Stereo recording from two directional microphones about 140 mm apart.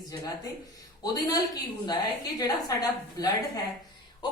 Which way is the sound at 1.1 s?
25° left (ahead or behind).